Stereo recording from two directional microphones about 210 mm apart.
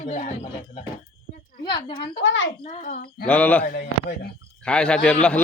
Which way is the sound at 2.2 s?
60° left (ahead or behind).